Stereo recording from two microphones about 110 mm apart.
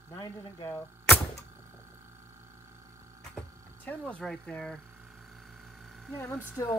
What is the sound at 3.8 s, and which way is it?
Speech, 15° left (ahead or behind).